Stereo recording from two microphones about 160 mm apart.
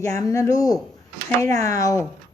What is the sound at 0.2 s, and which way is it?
Speech, 20° left (ahead or behind).